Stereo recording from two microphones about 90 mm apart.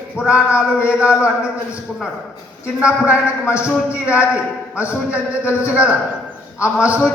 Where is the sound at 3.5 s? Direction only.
15° right (ahead or behind).